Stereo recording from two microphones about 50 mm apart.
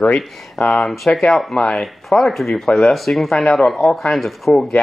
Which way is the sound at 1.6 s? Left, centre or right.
Centre.